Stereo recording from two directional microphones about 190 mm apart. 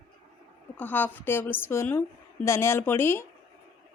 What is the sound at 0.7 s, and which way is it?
A woman's voice, 10° left (ahead or behind).